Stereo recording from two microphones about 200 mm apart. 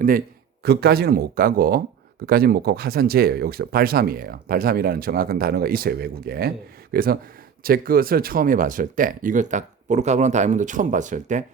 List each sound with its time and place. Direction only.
0.6 s speech: 55° right (ahead or behind)